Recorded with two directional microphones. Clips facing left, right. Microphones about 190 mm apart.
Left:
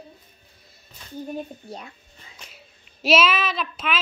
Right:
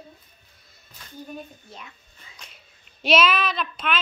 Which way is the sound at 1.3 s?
40° left (ahead or behind).